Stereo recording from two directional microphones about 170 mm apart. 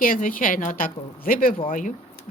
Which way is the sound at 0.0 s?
55° left (ahead or behind).